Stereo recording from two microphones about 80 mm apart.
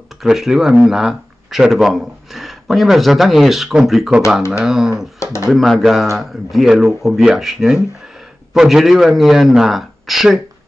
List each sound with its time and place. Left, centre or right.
0.2 s a man's voice: centre
5.2 s speech: left
5.5 s a man's voice: centre